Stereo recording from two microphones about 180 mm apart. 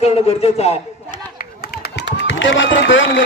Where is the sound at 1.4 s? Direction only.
60° left (ahead or behind); by 3.2 s 90° left.